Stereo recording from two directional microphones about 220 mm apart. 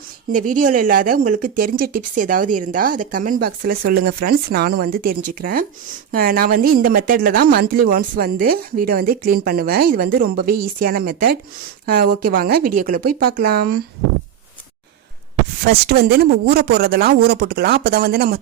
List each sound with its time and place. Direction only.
0.3 s speech: 35° right (ahead or behind)
15.9 s speech: 45° right (ahead or behind)